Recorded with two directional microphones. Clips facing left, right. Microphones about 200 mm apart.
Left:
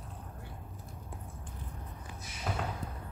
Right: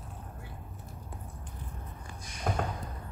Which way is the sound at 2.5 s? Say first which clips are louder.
Right 5 dB; 50° right (ahead or behind).